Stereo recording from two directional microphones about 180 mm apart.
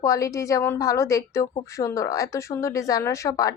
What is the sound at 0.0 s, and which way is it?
A woman's voice, 20° left (ahead or behind).